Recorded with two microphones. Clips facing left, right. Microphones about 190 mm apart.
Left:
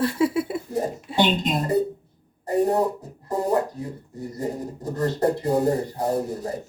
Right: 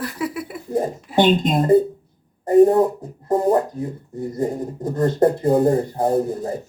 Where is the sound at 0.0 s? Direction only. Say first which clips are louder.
Left 5 dB; 25° left (ahead or behind).